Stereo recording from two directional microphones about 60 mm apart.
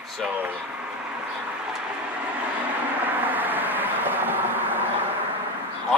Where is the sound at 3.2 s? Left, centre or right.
Right.